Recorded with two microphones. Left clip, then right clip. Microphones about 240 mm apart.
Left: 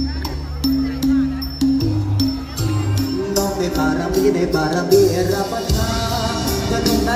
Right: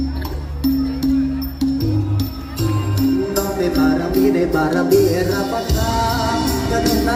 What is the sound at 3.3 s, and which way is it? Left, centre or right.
Music, centre.